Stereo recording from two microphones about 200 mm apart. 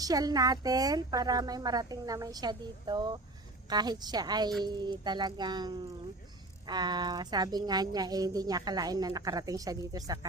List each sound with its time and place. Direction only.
0.0 s a woman's voice: 20° right (ahead or behind)